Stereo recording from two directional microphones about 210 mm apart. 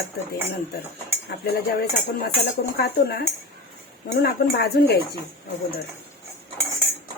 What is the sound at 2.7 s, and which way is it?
A woman's voice, 50° left (ahead or behind).